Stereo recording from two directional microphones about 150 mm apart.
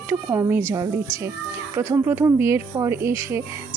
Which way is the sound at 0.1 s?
15° right (ahead or behind).